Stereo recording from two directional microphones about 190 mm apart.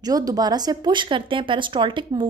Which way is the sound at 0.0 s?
20° right (ahead or behind).